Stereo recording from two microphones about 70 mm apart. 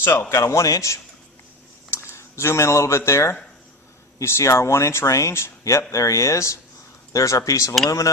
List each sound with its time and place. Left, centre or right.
0.0 s speech: left